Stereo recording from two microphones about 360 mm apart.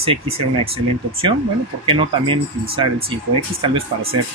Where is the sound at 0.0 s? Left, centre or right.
Centre.